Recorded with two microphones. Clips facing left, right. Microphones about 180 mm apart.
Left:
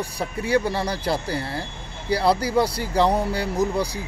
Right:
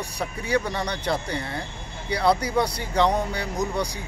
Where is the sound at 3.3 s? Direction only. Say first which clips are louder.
Left 5 dB; 30° left (ahead or behind).